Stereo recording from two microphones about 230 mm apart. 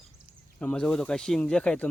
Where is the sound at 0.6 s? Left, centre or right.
Centre.